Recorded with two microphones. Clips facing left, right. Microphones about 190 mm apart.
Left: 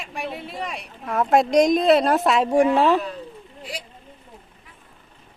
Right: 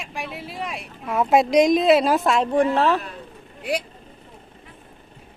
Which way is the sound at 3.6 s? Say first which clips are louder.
Right 10 dB; 65° right (ahead or behind).